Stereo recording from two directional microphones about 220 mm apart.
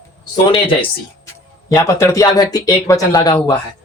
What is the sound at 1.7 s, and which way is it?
Speech, 10° left (ahead or behind).